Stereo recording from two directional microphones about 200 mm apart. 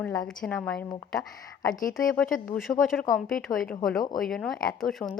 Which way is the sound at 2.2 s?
45° left (ahead or behind).